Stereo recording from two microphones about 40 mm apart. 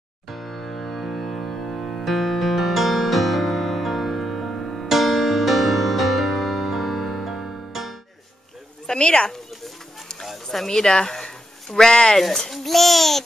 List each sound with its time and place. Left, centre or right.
0.3 s music: centre
4.8 s music: centre
8.8 s speech: left
10.2 s a sound: centre
10.7 s speech: centre
12.2 s a child's voice: centre